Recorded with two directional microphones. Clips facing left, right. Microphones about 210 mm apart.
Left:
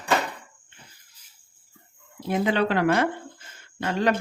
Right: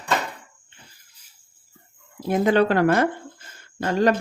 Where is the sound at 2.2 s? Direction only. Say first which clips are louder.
Right 5 dB; 45° right (ahead or behind).